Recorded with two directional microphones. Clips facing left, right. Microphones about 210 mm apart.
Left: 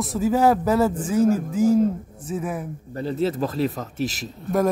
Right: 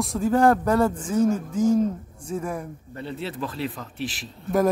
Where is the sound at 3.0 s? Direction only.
40° left (ahead or behind).